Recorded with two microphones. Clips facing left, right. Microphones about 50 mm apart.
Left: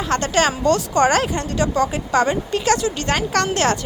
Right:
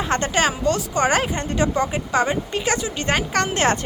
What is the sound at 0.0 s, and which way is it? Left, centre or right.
Speech, right.